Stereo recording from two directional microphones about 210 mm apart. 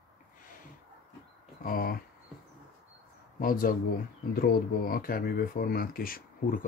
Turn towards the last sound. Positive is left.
turn(degrees=45)  # may be behind; listen again after turning